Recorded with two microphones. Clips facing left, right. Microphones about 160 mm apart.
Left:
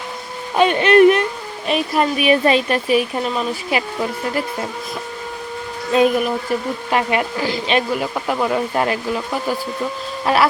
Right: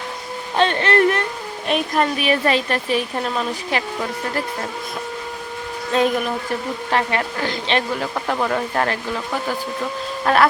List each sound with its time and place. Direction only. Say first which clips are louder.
0.5 s a sound: left 5 dB; 10° left (ahead or behind)
1.6 s speech: left 1 dB; 5° left (ahead or behind)
2.3 s speech: left 6 dB; 20° left (ahead or behind)
5.9 s speech: left 4 dB; 10° left (ahead or behind)